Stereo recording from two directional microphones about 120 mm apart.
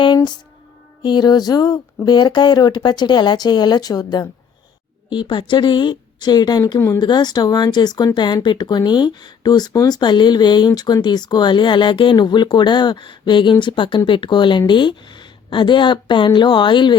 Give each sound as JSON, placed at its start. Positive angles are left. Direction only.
{"t": 0.0, "sound": "music", "side_deg": 35}
{"t": 1.0, "sound": "speech", "side_deg": 40}
{"t": 7.0, "sound": "speech", "side_deg": 35}